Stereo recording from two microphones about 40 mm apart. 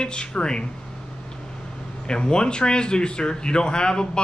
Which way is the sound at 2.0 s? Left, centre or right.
Left.